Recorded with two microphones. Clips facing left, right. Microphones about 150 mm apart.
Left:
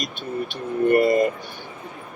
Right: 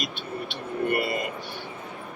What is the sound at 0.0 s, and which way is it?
Speech, 45° left (ahead or behind).